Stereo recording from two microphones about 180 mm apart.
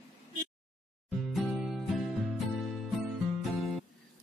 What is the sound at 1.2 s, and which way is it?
Music, centre (ahead or behind).